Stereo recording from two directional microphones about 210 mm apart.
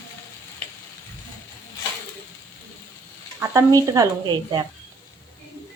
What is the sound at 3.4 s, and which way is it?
Speech, 15° right (ahead or behind).